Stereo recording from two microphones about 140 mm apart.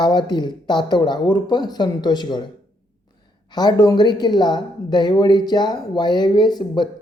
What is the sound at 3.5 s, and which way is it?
A woman's voice, 30° left (ahead or behind).